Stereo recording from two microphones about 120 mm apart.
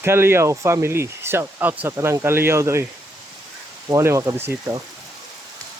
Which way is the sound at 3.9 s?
25° right (ahead or behind).